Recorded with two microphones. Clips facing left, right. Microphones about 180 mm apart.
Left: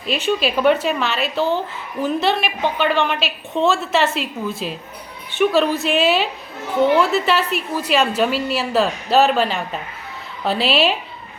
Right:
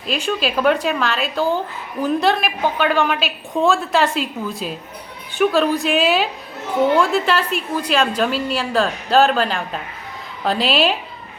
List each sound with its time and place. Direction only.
0.0 s a woman's voice: centre (ahead or behind)